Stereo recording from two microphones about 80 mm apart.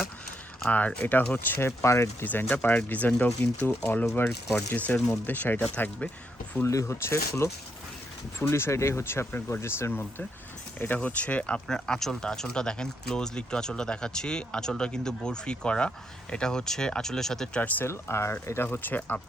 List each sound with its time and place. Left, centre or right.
0.7 s speech: centre
1.5 s speech: left
2.2 s speech: centre
4.9 s speech: centre
5.2 s speech: left
6.7 s speech: left; by 17.6 s centre
17.6 s speech: left
17.8 s speech: left